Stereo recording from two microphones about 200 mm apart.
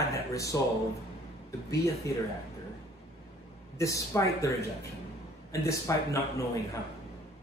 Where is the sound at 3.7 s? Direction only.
15° left (ahead or behind).